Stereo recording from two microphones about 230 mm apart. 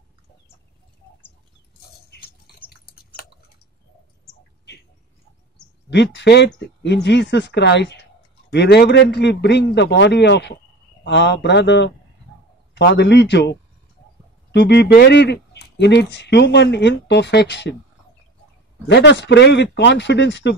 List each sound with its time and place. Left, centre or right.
5.9 s speech: left
18.9 s speech: left